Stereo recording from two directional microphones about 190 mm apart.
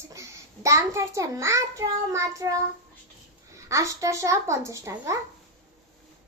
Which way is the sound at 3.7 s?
15° right (ahead or behind).